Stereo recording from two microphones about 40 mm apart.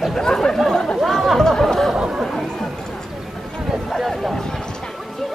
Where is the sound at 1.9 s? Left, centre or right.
Centre.